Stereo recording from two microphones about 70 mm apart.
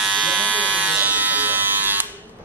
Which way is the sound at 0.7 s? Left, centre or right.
Right.